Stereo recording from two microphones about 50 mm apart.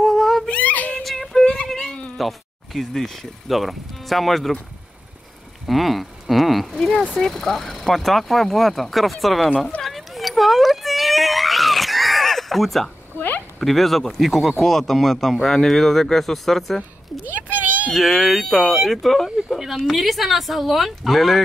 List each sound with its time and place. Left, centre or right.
0.0 s cat: centre
0.5 s cat: left
1.0 s female singing: centre
1.7 s a sound: centre
2.1 s speech: centre
5.7 s speech: centre
6.7 s speech: centre
9.8 s a sound: centre
13.6 s speech: centre
17.3 s a sound: right
17.9 s speech: centre